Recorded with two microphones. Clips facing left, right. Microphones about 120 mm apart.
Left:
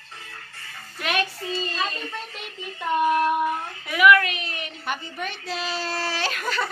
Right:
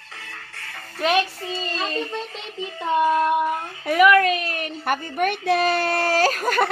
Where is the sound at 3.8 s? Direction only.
40° right (ahead or behind).